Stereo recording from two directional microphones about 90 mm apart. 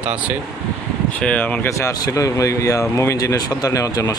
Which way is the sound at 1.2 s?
15° left (ahead or behind).